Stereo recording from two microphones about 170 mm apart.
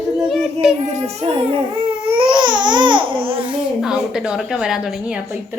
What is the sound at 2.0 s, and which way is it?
Baby cry, 30° right (ahead or behind).